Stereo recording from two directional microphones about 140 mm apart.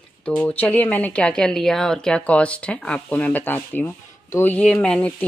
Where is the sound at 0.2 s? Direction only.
10° left (ahead or behind).